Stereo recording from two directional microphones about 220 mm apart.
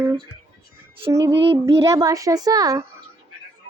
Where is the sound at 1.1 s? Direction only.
15° right (ahead or behind).